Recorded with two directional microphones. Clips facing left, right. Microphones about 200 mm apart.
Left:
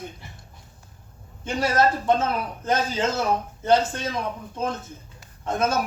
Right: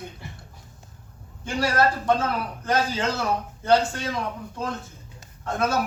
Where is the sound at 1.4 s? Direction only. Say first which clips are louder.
Left 1 dB; 20° left (ahead or behind).